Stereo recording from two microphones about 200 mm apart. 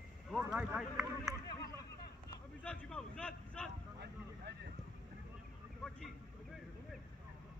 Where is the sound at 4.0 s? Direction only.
55° right (ahead or behind).